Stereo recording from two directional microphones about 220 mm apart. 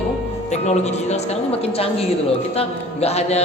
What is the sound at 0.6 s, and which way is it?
A woman's voice, 30° left (ahead or behind).